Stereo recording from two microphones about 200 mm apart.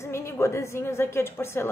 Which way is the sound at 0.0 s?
15° left (ahead or behind).